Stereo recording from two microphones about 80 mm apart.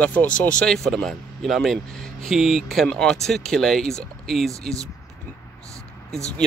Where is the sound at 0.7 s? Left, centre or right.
Centre.